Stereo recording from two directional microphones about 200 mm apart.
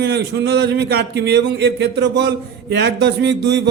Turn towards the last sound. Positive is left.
turn(degrees=-60)  # may be behind; listen again after turning